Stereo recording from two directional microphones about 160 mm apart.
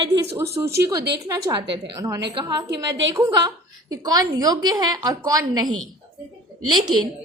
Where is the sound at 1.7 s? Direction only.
20° right (ahead or behind).